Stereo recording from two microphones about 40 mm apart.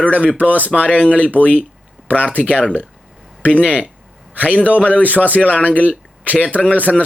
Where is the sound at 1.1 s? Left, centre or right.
Left.